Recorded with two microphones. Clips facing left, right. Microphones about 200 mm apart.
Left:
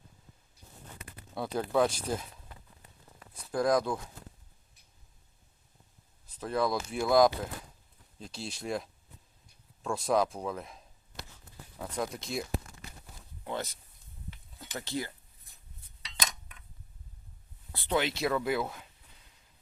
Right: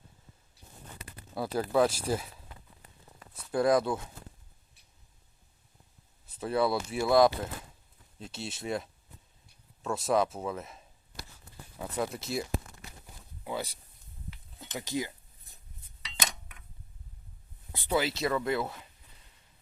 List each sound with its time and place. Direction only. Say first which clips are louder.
1.0 s a sound: right 1 dB; 35° right (ahead or behind)
1.4 s speech: right 1 dB; 5° right (ahead or behind)
3.5 s speech: right 2 dB; 5° right (ahead or behind)
6.2 s speech: right 2 dB; 5° right (ahead or behind)
14.7 s speech: right 2 dB; 15° right (ahead or behind)
17.7 s a sound: right 1 dB; 15° right (ahead or behind)
17.9 s speech: even; centre (ahead or behind)